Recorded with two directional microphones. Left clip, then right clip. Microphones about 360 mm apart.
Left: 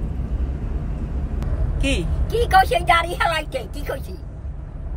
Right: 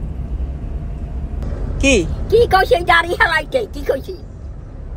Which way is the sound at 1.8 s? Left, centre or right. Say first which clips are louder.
Right 10 dB; centre.